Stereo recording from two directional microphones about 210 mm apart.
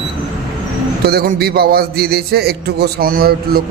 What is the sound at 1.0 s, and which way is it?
A man's voice, 45° right (ahead or behind).